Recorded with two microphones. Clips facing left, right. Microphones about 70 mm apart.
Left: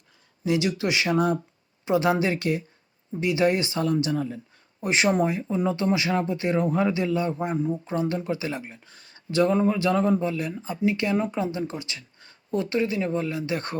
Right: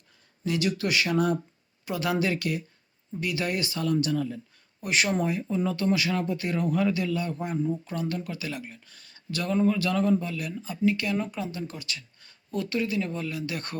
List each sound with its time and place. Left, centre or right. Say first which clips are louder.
0.4 s speech: left 3 dB; left